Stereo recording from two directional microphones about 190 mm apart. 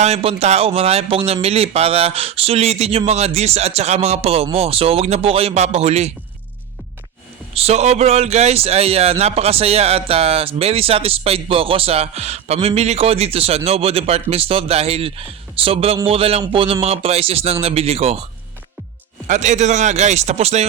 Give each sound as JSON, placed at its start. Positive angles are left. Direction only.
{"t": 0.0, "sound": "speech", "side_deg": -35}
{"t": 7.5, "sound": "speech", "side_deg": -35}
{"t": 19.3, "sound": "speech", "side_deg": -40}